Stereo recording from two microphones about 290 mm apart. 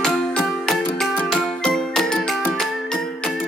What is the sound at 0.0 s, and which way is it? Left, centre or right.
Music, centre.